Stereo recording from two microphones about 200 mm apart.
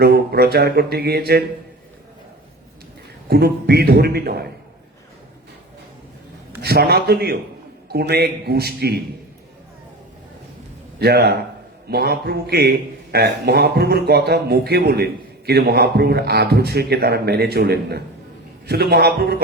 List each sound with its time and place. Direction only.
0.0 s a man's voice: 55° right (ahead or behind)
3.2 s a man's voice: 55° right (ahead or behind)
6.6 s a man's voice: 55° right (ahead or behind)
11.0 s a man's voice: 55° right (ahead or behind)